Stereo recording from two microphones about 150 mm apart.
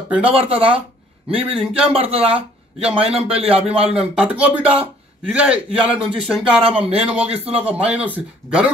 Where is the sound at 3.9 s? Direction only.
10° right (ahead or behind).